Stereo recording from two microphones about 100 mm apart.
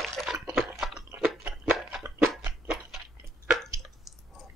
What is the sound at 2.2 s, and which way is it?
Chewing, centre (ahead or behind).